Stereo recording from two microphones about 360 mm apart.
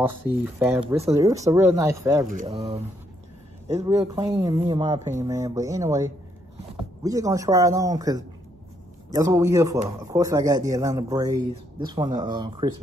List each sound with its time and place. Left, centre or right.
0.6 s speech: centre